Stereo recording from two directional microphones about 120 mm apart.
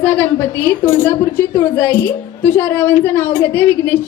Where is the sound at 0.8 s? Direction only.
15° left (ahead or behind).